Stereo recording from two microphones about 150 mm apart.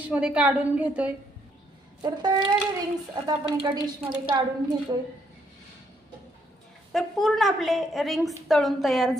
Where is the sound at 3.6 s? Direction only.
30° right (ahead or behind).